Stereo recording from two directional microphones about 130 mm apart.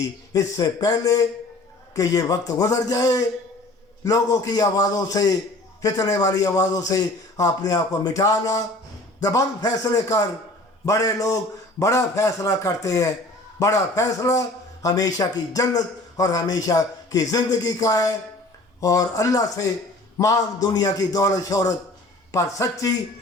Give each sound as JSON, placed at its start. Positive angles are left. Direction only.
{"t": 0.3, "sound": "a man's voice", "side_deg": 25}